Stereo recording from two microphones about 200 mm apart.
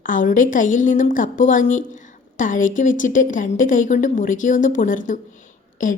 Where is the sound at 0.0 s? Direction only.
40° left (ahead or behind).